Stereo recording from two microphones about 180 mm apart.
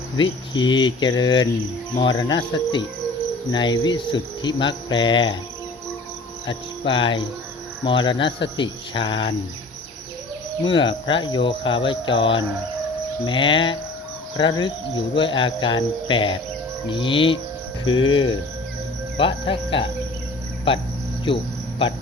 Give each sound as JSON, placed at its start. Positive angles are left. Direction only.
{"t": 0.2, "sound": "cricket", "side_deg": 25}
{"t": 6.5, "sound": "cricket", "side_deg": 30}
{"t": 10.6, "sound": "cricket", "side_deg": 25}